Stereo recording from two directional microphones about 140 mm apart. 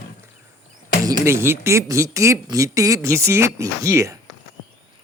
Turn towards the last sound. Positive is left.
turn(degrees=-20)  # may be behind; listen again after turning